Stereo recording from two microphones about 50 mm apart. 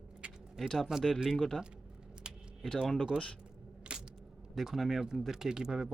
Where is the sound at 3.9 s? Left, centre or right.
Centre.